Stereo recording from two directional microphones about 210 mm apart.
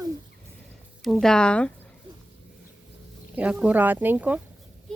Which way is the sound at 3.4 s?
5° right (ahead or behind).